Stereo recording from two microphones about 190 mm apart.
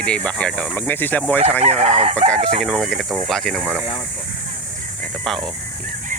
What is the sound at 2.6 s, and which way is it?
Speech, 5° right (ahead or behind).